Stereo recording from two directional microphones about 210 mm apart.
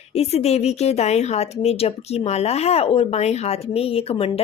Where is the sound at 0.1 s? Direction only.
30° left (ahead or behind).